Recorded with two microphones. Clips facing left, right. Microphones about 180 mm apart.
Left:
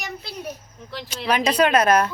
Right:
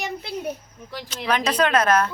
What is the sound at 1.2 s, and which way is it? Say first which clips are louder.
Speech: left 2 dB; 10° left (ahead or behind).